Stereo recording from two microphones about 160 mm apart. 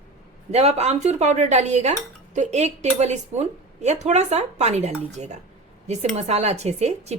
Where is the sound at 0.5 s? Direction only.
40° right (ahead or behind).